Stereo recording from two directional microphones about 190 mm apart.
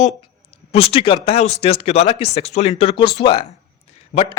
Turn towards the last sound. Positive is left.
turn(degrees=30)  # may be behind; listen again after turning